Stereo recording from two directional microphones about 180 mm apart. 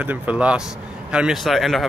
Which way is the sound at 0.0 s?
10° right (ahead or behind).